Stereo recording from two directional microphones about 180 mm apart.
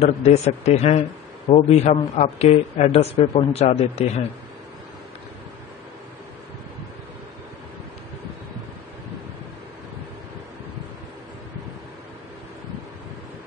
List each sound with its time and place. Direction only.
0.0 s speech: 40° left (ahead or behind)